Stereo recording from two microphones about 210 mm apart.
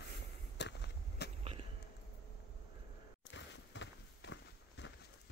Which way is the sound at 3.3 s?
60° left (ahead or behind).